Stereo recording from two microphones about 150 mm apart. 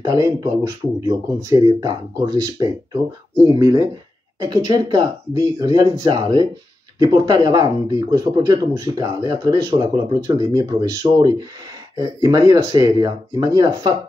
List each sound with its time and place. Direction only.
0.0 s speech: 25° right (ahead or behind)